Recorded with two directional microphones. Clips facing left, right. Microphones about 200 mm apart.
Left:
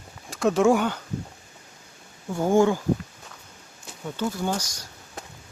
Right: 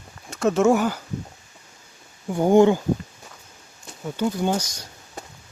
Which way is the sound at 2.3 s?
20° right (ahead or behind).